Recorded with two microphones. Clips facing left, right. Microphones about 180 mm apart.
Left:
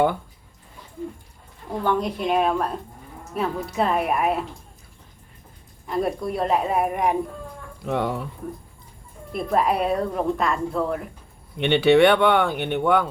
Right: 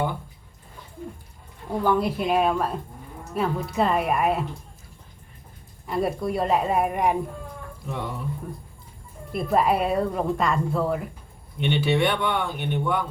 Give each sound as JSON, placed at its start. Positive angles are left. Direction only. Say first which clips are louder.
{"t": 1.8, "sound": "a woman's voice", "louder": "right 1 dB", "side_deg": -5}
{"t": 5.9, "sound": "a woman's voice", "louder": "even", "side_deg": -5}
{"t": 7.9, "sound": "speech", "louder": "left 8 dB", "side_deg": 75}
{"t": 9.3, "sound": "a woman's voice", "louder": "even", "side_deg": 0}
{"t": 11.6, "sound": "speech", "louder": "left 7 dB", "side_deg": 75}